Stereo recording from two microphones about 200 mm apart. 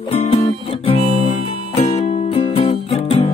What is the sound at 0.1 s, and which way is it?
Music, 30° left (ahead or behind).